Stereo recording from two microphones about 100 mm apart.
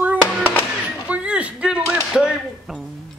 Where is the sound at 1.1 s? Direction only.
15° right (ahead or behind).